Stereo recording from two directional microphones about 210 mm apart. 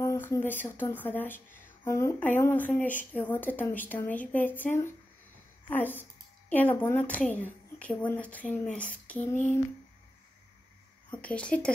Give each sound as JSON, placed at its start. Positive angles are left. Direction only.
{"t": 0.0, "sound": "speech", "side_deg": 15}
{"t": 11.1, "sound": "speech", "side_deg": 5}